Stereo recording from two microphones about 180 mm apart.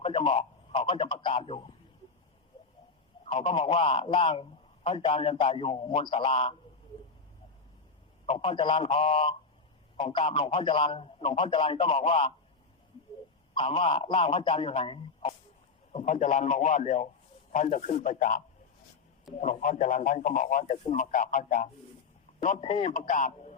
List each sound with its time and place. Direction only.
0.0 s speech: 30° left (ahead or behind)
3.2 s a man's voice: 30° left (ahead or behind)
8.3 s a man's voice: 30° left (ahead or behind)
13.5 s a man's voice: 30° left (ahead or behind); by 21.7 s 50° left (ahead or behind)
22.4 s a man's voice: 35° left (ahead or behind)